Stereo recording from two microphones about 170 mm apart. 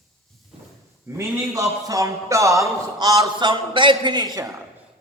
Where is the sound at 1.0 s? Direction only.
15° right (ahead or behind).